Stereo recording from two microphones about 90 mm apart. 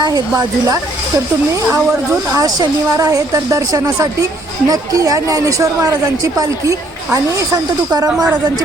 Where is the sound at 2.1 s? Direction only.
40° right (ahead or behind).